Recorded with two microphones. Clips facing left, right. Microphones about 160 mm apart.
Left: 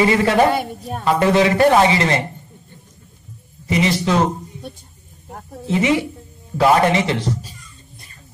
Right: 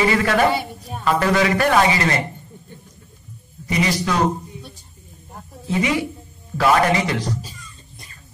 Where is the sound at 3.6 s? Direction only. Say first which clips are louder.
Left 3 dB; 25° left (ahead or behind).